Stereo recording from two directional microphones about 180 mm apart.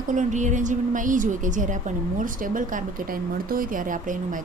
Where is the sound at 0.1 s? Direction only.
45° right (ahead or behind).